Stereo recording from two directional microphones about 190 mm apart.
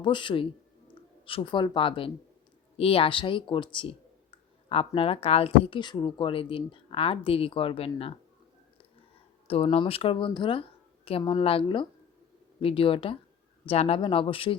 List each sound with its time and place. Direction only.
0.0 s speech: 25° left (ahead or behind)
9.5 s speech: 30° left (ahead or behind)